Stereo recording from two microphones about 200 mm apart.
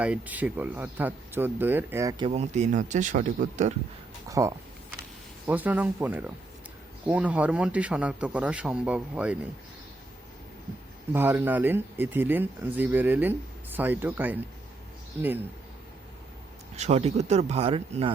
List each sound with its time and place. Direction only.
0.0 s speech: 5° right (ahead or behind); by 3.8 s 35° right (ahead or behind)
4.3 s speech: 15° right (ahead or behind)
11.1 s speech: 10° right (ahead or behind)
16.7 s speech: 35° right (ahead or behind)